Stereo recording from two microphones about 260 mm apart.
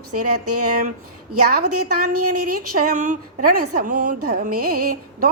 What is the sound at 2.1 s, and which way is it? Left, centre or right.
Speech, right.